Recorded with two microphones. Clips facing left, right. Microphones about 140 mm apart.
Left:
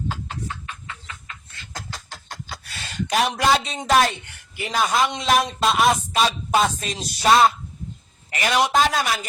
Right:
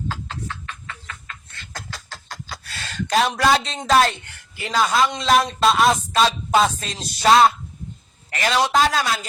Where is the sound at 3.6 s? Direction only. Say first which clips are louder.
Right 1 dB; 10° left (ahead or behind).